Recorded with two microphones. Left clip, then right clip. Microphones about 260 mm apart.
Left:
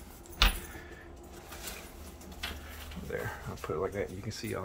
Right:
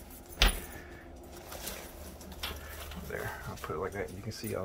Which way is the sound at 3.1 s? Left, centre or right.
Left.